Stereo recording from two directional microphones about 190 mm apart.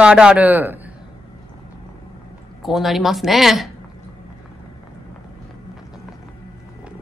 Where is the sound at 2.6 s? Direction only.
Centre (ahead or behind).